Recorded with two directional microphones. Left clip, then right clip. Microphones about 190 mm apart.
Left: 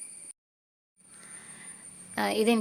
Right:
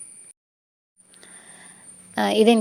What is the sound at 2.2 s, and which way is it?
Speech, 30° right (ahead or behind).